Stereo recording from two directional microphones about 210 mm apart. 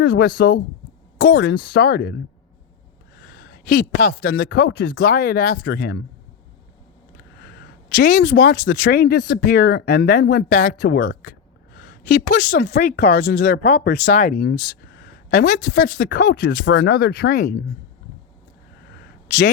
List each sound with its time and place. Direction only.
0.0 s speech: 50° left (ahead or behind)
7.4 s speech: 50° left (ahead or behind)